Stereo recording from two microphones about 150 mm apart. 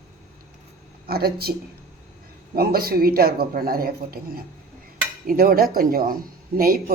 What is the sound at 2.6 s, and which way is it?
Speech, 90° right.